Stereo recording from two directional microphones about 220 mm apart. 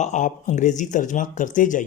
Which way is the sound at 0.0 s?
35° left (ahead or behind).